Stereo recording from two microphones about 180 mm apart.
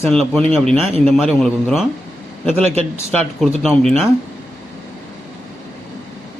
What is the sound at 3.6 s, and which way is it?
Speech, centre (ahead or behind).